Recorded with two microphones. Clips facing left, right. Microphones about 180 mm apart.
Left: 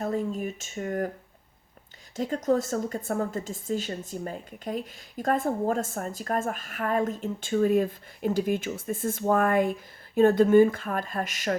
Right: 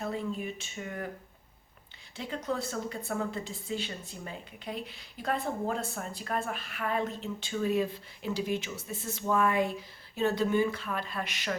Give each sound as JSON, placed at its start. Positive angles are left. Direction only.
{"t": 0.0, "sound": "speech", "side_deg": 45}
{"t": 2.1, "sound": "a woman's voice", "side_deg": 45}